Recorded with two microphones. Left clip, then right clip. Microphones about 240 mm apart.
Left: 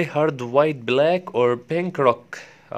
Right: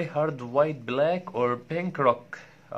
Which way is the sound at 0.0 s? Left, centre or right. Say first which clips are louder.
Left 6 dB; left.